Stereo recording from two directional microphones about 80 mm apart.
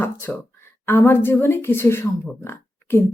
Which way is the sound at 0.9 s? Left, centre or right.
Left.